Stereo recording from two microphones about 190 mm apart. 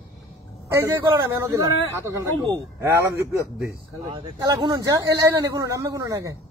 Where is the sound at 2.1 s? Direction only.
15° right (ahead or behind).